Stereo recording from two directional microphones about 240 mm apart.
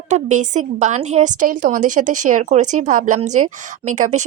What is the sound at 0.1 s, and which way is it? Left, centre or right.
A woman's voice, right.